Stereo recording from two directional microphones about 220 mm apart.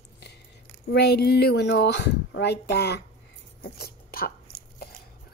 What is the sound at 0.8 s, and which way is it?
Speech, 45° left (ahead or behind).